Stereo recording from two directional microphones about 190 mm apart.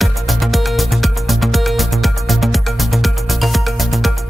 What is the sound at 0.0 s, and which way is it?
Music, centre (ahead or behind).